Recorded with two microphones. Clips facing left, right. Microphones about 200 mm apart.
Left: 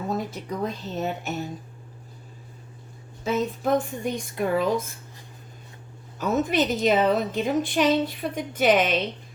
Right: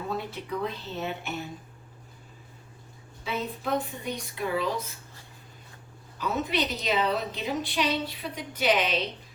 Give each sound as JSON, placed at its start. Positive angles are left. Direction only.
{"t": 0.1, "sound": "a woman's voice", "side_deg": 45}
{"t": 3.2, "sound": "a woman's voice", "side_deg": 45}
{"t": 6.1, "sound": "a woman's voice", "side_deg": 45}